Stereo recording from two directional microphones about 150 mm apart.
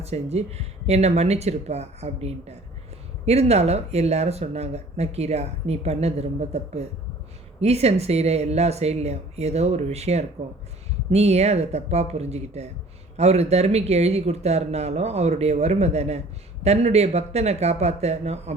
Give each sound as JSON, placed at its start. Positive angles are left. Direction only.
{"t": 0.0, "sound": "speech", "side_deg": -45}